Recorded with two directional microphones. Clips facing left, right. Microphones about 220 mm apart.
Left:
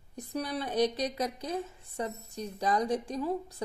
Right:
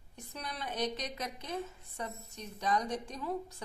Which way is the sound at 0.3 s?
35° left (ahead or behind).